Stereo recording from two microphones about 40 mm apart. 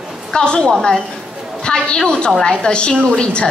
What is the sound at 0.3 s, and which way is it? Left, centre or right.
A woman's voice, centre.